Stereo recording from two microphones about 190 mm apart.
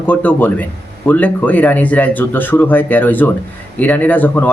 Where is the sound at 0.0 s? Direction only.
10° left (ahead or behind).